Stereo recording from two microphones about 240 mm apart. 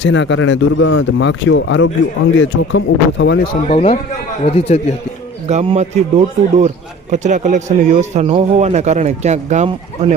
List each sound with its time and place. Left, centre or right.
0.0 s a man's voice: left
3.7 s a man's voice: left
5.5 s speech: right